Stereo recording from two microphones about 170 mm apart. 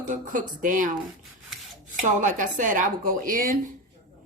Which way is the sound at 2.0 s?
50° right (ahead or behind).